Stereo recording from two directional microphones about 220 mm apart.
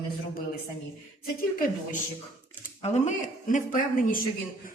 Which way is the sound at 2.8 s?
30° left (ahead or behind).